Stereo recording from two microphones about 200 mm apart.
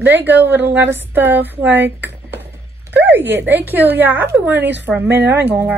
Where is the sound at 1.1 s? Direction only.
10° right (ahead or behind).